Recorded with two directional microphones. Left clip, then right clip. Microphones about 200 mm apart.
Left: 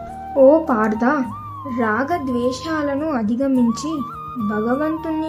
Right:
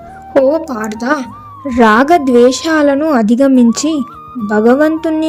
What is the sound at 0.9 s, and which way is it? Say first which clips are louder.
Speech: right 3 dB; 40° right (ahead or behind).